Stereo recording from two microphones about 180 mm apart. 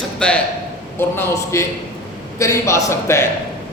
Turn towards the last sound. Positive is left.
turn(degrees=15)  # may be behind; listen again after turning